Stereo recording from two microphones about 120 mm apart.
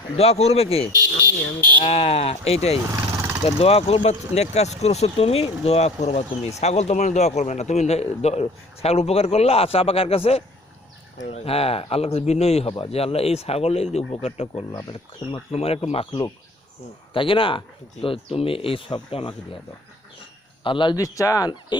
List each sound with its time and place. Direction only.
0.2 s a man's voice: 60° left (ahead or behind)
2.9 s vehicle: 25° right (ahead or behind)
3.4 s a man's voice: 55° left (ahead or behind)
20.7 s speech: 40° left (ahead or behind)
21.0 s speech: 30° left (ahead or behind)